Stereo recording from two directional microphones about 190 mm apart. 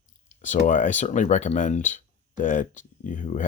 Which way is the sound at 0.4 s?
40° left (ahead or behind).